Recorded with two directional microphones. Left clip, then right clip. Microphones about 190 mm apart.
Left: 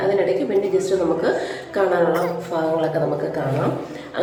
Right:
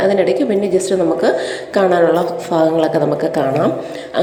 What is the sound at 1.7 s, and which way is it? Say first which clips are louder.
A woman's voice: right 6 dB; 35° right (ahead or behind).